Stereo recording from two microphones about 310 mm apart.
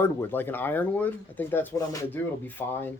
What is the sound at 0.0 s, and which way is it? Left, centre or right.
Speech, centre.